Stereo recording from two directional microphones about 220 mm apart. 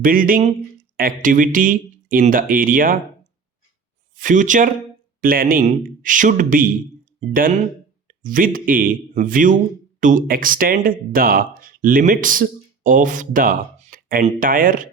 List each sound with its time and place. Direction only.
0.0 s speech: 40° right (ahead or behind)
4.1 s speech: 35° right (ahead or behind)